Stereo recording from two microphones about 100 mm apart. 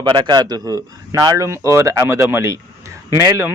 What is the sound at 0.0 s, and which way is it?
A man's voice, 45° right (ahead or behind).